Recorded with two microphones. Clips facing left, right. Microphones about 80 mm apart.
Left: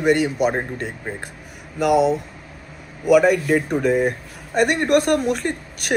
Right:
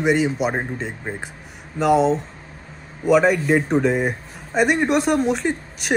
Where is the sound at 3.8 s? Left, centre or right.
Centre.